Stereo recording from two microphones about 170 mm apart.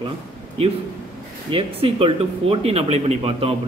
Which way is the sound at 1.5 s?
35° right (ahead or behind).